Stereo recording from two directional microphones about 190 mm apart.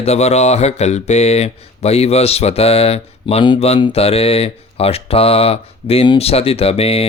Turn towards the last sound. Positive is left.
turn(degrees=30)  # may be behind; listen again after turning